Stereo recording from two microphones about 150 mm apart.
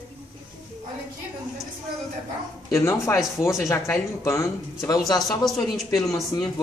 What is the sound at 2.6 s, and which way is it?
Speech, 20° left (ahead or behind).